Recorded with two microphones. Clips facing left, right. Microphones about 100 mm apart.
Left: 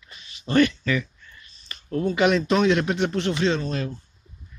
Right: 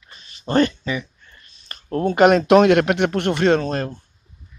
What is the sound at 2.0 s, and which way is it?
Speech, 50° right (ahead or behind).